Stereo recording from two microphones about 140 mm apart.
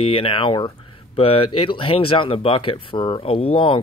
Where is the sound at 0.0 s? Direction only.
40° left (ahead or behind).